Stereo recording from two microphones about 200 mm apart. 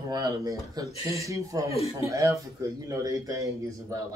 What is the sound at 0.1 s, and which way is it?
Speech, 20° right (ahead or behind).